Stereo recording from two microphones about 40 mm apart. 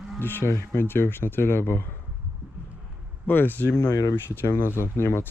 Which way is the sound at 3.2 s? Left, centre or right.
Left.